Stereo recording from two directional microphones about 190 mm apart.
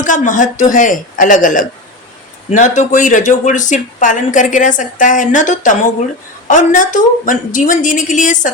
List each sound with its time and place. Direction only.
0.0 s a woman's voice: 40° left (ahead or behind)